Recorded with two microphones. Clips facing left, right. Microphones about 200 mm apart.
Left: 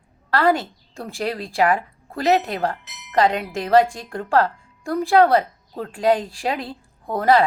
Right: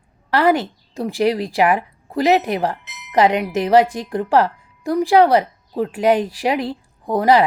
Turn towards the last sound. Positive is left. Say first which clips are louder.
# right 3 dB
turn(degrees=-20)  # may be behind; listen again after turning